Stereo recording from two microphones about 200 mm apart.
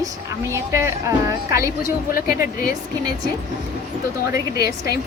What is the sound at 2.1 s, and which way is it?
Speech, 45° left (ahead or behind).